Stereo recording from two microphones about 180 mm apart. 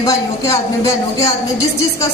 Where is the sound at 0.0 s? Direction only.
20° left (ahead or behind).